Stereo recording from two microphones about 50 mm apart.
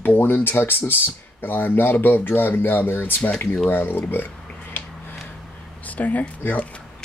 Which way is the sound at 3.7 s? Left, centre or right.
Left.